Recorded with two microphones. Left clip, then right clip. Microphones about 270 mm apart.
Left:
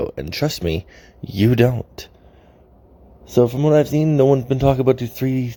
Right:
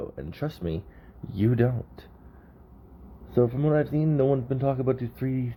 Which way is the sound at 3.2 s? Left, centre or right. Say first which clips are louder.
Left 8 dB; left.